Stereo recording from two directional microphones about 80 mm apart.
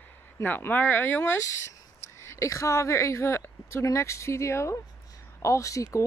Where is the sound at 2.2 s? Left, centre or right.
Left.